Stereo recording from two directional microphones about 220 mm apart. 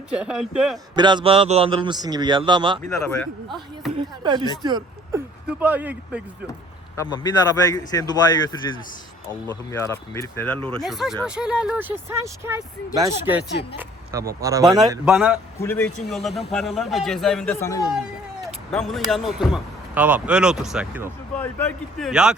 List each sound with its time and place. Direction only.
0.1 s speech: 5° right (ahead or behind)
0.9 s a man's voice: 20° right (ahead or behind)
3.9 s a man's voice: 20° right (ahead or behind)
5.5 s speech: 10° right (ahead or behind)
6.9 s a man's voice: 15° left (ahead or behind)
9.7 s speech: 10° left (ahead or behind); by 14.7 s 15° right (ahead or behind)
15.0 s speech: 5° right (ahead or behind)
15.6 s a man's voice: 10° left (ahead or behind)
17.9 s speech: centre (ahead or behind)
21.3 s speech: 5° left (ahead or behind)